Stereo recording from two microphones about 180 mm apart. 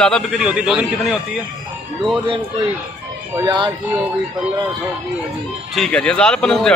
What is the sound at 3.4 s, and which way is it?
Speech, 25° right (ahead or behind).